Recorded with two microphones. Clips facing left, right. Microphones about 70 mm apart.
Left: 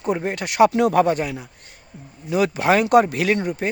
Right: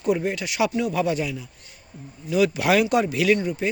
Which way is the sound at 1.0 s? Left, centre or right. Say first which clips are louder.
Left 3 dB; left.